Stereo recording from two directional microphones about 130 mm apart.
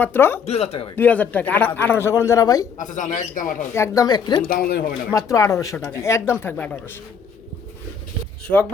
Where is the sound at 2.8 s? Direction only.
75° left (ahead or behind).